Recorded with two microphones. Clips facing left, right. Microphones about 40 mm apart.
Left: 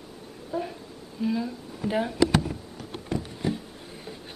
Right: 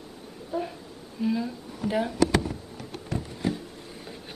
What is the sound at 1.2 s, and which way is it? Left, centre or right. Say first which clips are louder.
Speech: even; centre.